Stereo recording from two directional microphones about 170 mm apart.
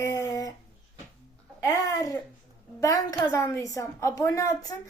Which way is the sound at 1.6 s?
20° left (ahead or behind).